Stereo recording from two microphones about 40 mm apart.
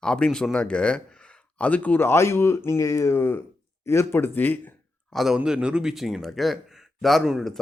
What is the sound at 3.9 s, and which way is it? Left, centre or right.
Speech, left.